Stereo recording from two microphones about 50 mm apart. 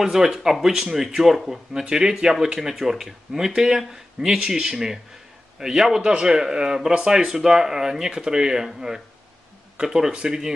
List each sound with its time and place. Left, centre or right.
0.0 s speech: centre